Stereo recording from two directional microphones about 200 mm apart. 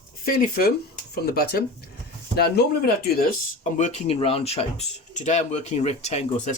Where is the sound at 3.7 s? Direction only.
35° left (ahead or behind).